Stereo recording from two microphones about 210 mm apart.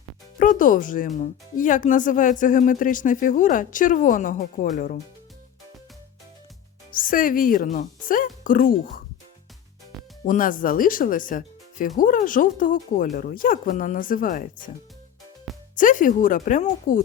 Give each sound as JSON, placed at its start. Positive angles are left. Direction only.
{"t": 0.3, "sound": "speech", "side_deg": 40}
{"t": 6.9, "sound": "speech", "side_deg": 40}
{"t": 10.2, "sound": "speech", "side_deg": 40}
{"t": 15.7, "sound": "speech", "side_deg": 40}